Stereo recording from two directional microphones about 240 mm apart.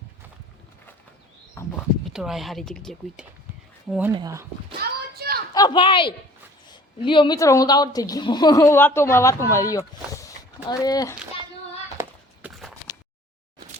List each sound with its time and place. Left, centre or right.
1.6 s speech: centre
2.0 s speech: centre
4.1 s speech: centre
4.8 s a sound: right
5.5 s a woman's voice: centre
11.9 s walk: centre